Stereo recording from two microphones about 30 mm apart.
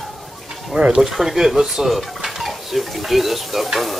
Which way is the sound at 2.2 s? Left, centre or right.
Centre.